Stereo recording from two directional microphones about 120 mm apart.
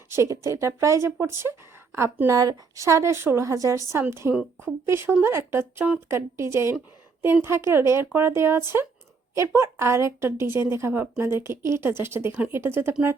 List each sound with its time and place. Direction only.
0.1 s a woman's voice: 25° right (ahead or behind)